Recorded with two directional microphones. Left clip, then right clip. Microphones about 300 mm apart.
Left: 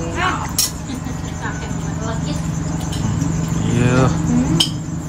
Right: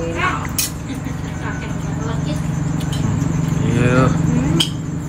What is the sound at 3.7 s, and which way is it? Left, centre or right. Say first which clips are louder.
Vehicle: right 1 dB; centre.